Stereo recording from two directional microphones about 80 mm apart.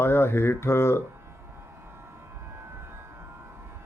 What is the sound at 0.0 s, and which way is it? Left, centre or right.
Speech, left.